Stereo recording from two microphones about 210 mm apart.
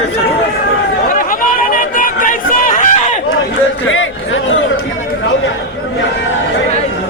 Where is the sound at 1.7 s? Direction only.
40° left (ahead or behind).